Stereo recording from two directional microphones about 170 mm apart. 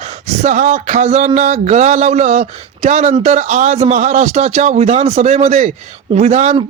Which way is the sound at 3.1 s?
40° right (ahead or behind).